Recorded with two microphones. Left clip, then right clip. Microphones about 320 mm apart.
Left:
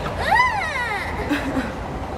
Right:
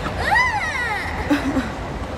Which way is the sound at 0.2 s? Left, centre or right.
Centre.